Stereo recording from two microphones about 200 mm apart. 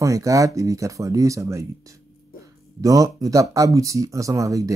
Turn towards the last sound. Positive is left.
turn(degrees=-15)  # may be behind; listen again after turning